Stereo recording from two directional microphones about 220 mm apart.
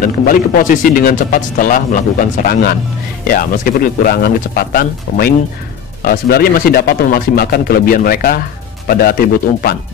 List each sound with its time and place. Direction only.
0.6 s speech: 40° left (ahead or behind)